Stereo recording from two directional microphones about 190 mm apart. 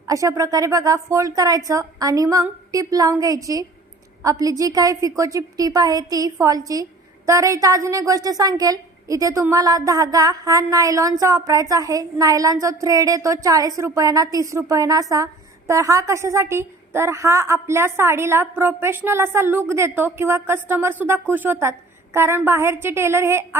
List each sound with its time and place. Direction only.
0.1 s a woman's voice: 15° right (ahead or behind)